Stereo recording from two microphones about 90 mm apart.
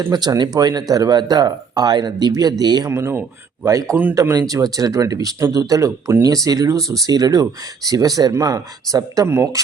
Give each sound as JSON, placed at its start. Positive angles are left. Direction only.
{"t": 0.1, "sound": "speech", "side_deg": -50}
{"t": 2.9, "sound": "speech", "side_deg": -30}
{"t": 9.2, "sound": "speech", "side_deg": -30}